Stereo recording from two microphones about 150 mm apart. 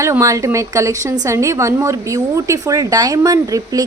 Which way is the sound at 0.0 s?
20° right (ahead or behind).